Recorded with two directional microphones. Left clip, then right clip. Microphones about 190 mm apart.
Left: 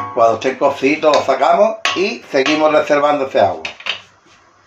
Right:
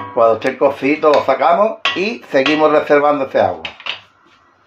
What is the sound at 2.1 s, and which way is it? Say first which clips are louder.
Speech: right 1 dB; 35° right (ahead or behind).